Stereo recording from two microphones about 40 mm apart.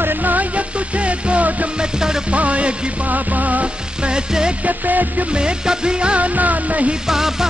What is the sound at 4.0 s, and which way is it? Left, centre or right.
Music, right.